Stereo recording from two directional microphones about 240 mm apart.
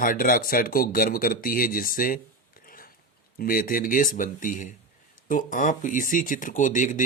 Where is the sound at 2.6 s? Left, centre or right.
Left.